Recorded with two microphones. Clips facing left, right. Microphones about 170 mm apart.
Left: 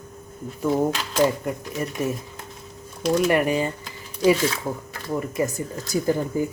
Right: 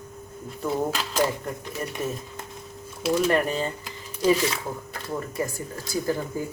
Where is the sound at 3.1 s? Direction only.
15° left (ahead or behind).